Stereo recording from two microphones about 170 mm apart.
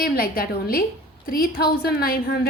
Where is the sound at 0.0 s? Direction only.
60° left (ahead or behind).